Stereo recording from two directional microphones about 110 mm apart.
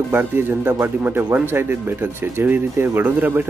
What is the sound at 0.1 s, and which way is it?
Speech, 20° right (ahead or behind).